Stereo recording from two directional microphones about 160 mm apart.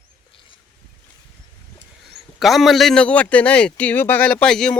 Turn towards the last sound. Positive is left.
turn(degrees=5)  # may be behind; listen again after turning